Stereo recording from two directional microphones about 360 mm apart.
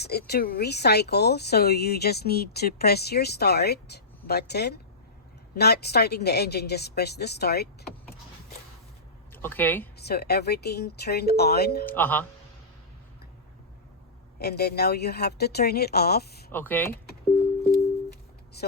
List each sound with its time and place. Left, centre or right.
0.0 s speech: left
9.3 s speech: centre
10.0 s speech: left
11.9 s speech: centre
14.3 s speech: left
16.5 s speech: centre